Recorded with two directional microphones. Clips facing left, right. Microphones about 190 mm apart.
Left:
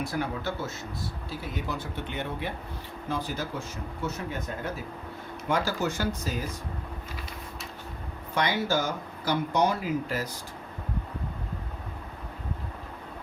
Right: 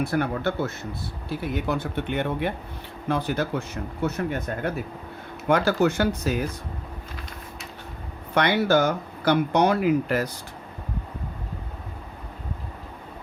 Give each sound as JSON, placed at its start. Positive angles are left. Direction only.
{"t": 0.0, "sound": "speech", "side_deg": -60}
{"t": 8.4, "sound": "speech", "side_deg": -65}